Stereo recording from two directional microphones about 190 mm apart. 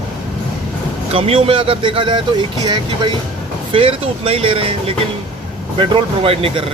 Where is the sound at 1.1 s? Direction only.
30° right (ahead or behind).